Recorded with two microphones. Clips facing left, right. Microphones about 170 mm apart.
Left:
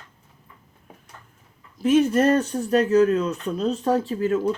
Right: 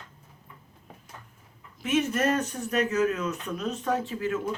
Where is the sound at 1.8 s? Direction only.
35° left (ahead or behind).